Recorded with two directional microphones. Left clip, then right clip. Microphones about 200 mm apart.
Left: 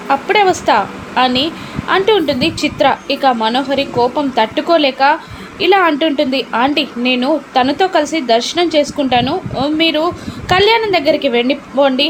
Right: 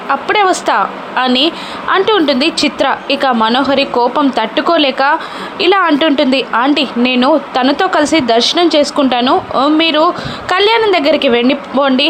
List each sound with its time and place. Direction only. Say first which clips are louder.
0.1 s a woman's voice: even; 20° right (ahead or behind)